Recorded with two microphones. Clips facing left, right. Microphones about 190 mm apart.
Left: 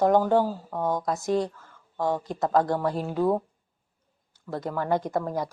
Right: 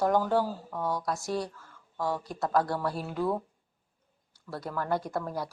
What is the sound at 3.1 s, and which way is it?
Speech, 35° left (ahead or behind).